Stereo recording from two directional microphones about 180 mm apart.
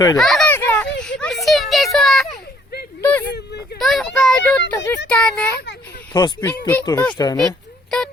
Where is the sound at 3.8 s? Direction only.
Centre (ahead or behind).